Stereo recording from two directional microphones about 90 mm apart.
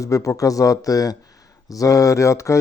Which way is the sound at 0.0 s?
35° left (ahead or behind).